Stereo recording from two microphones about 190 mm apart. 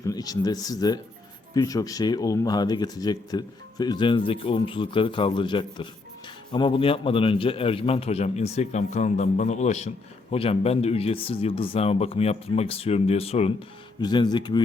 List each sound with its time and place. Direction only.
0.0 s a man's voice: 20° left (ahead or behind)